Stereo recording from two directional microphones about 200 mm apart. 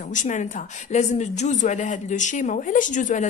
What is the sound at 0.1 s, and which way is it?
Speech, 40° left (ahead or behind).